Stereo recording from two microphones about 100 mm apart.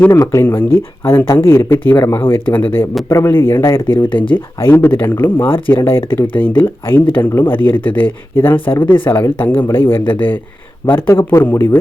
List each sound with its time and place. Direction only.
0.2 s speech: 30° left (ahead or behind)
3.9 s speech: 55° left (ahead or behind)
4.6 s speech: 20° left (ahead or behind)